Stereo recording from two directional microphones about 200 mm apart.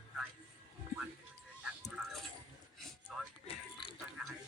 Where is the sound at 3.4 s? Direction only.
25° left (ahead or behind).